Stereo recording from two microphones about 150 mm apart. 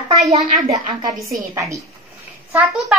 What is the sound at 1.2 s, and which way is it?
Speech, 20° right (ahead or behind).